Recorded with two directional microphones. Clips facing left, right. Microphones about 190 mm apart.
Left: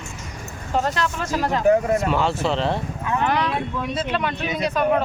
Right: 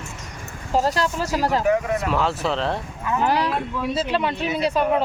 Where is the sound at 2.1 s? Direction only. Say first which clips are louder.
Left 1 dB; centre (ahead or behind).